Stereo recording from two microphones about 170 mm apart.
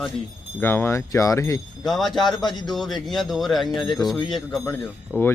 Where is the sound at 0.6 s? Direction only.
15° left (ahead or behind).